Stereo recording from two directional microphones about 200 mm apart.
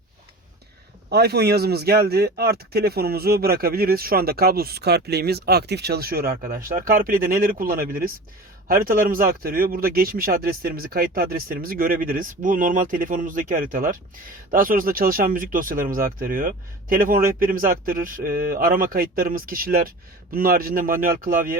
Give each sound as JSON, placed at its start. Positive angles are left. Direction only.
{"t": 1.1, "sound": "a man's voice", "side_deg": -55}